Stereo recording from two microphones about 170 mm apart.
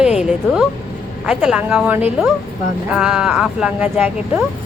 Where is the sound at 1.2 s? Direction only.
5° right (ahead or behind).